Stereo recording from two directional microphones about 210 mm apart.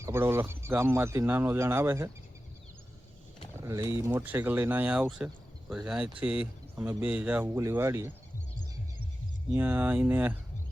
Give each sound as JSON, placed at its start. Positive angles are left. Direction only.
{"t": 0.0, "sound": "speech", "side_deg": -10}
{"t": 3.6, "sound": "speech", "side_deg": -15}
{"t": 9.5, "sound": "speech", "side_deg": -10}